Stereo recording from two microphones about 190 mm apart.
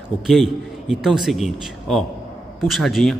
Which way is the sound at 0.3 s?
Centre (ahead or behind).